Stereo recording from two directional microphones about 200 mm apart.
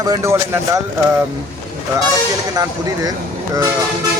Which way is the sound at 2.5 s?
20° right (ahead or behind).